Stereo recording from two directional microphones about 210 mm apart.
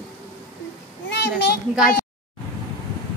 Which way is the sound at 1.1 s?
50° left (ahead or behind).